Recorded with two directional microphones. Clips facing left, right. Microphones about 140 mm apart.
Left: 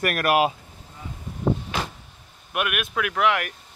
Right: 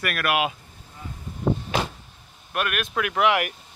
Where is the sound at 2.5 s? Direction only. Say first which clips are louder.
Even; 10° left (ahead or behind).